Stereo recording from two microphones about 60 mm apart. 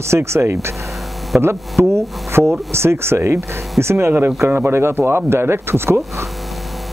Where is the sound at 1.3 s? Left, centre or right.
Right.